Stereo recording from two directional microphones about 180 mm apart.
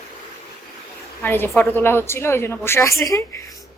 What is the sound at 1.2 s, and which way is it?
A woman's voice, 10° left (ahead or behind).